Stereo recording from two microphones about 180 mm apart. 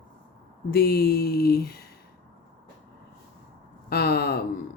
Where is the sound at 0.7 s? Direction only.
60° left (ahead or behind).